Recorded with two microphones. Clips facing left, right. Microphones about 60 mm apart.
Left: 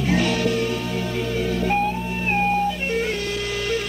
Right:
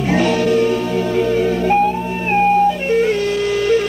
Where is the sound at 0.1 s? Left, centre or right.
Right.